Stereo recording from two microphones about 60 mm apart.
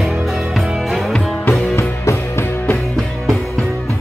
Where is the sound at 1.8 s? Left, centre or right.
Left.